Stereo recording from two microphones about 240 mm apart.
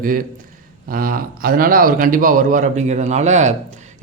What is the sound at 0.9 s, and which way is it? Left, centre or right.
A man's voice, right.